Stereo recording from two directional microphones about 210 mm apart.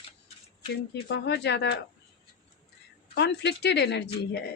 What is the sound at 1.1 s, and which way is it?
Speech, 55° left (ahead or behind).